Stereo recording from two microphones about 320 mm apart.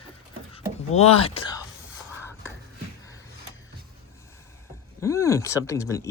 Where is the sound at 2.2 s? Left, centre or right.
Centre.